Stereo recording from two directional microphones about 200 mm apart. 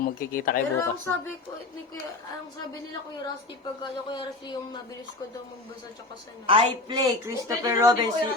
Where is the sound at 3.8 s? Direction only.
20° left (ahead or behind).